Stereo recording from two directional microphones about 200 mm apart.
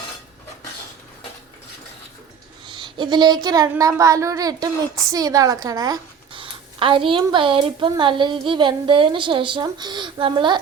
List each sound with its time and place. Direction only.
2.6 s a woman's voice: 25° right (ahead or behind)